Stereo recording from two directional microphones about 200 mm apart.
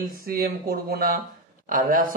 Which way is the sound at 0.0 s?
50° right (ahead or behind).